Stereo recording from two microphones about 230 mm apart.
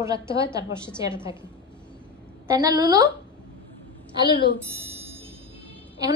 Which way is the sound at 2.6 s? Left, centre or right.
Centre.